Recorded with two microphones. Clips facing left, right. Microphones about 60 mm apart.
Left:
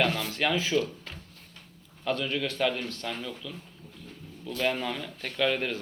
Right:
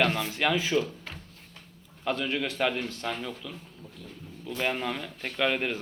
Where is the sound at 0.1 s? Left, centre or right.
Right.